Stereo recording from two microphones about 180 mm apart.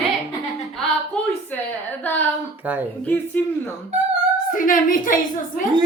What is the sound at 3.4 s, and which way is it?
Speech, 10° left (ahead or behind).